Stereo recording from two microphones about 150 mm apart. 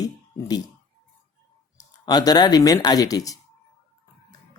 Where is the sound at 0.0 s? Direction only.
25° left (ahead or behind).